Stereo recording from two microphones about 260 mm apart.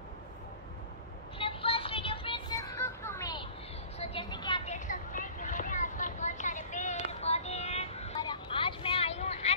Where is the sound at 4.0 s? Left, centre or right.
Left.